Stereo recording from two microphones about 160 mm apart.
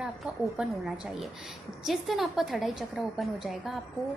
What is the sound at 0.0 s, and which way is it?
A woman's voice, 5° right (ahead or behind).